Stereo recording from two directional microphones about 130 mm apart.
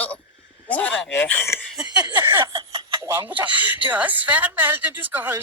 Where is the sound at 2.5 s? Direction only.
35° right (ahead or behind).